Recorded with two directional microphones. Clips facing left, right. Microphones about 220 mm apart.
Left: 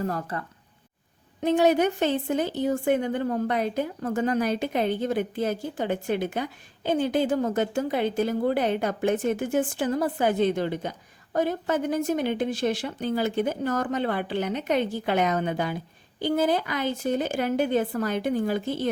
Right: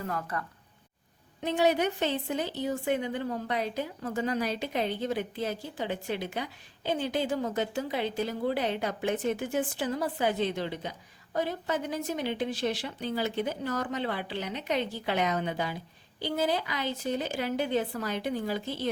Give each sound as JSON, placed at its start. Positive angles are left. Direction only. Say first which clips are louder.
{"t": 0.0, "sound": "speech", "louder": "left 5 dB", "side_deg": 35}
{"t": 1.4, "sound": "a woman's voice", "louder": "left 5 dB", "side_deg": 45}